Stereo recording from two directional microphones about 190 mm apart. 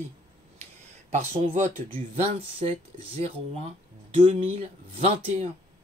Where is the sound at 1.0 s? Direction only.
35° right (ahead or behind).